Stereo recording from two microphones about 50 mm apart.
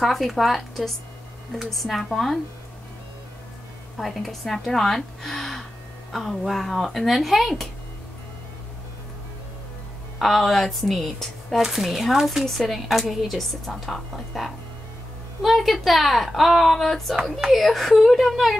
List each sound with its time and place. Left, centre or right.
0.0 s speech: centre
4.0 s a woman's voice: centre
10.1 s speech: centre
17.1 s speech: centre